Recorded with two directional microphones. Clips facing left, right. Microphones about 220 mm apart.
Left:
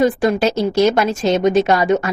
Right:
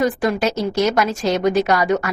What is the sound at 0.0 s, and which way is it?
A woman's voice, 25° left (ahead or behind).